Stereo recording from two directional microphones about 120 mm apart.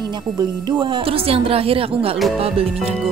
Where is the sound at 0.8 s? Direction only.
45° right (ahead or behind).